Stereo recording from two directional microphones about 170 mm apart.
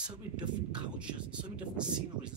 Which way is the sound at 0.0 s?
5° right (ahead or behind).